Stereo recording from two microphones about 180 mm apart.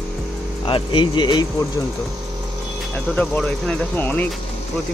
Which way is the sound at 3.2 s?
5° left (ahead or behind).